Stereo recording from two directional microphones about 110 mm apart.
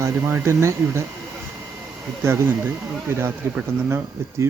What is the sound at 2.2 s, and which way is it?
Speech, 25° right (ahead or behind).